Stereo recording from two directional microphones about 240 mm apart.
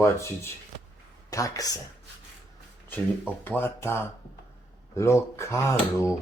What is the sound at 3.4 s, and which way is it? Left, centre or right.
Speech, centre.